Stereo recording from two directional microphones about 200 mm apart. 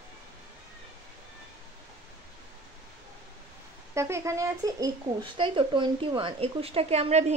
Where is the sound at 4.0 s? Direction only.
15° right (ahead or behind); by 7.3 s 35° right (ahead or behind).